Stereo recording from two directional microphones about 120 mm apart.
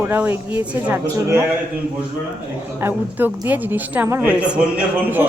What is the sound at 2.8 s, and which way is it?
A woman's voice, 15° right (ahead or behind).